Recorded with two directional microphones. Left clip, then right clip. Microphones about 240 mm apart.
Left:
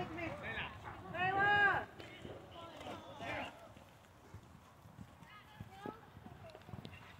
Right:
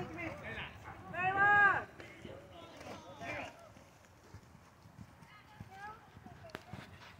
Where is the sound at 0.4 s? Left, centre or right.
Right.